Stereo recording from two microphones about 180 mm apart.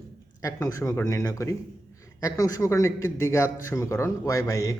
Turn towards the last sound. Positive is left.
turn(degrees=15)  # may be behind; listen again after turning